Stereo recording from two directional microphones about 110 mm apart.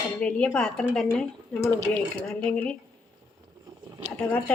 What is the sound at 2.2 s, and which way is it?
Speech, 10° left (ahead or behind).